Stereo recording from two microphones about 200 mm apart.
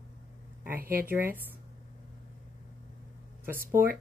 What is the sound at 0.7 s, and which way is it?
Speech, 45° right (ahead or behind).